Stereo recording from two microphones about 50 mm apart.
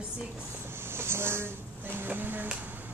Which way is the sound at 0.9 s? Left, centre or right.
Right.